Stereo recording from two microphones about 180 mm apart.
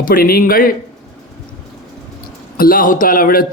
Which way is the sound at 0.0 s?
55° left (ahead or behind).